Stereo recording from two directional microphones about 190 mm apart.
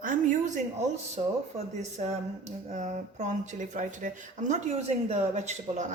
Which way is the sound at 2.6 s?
40° right (ahead or behind).